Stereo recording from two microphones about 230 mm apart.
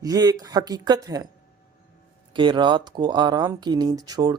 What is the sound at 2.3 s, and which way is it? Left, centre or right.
Speech, right.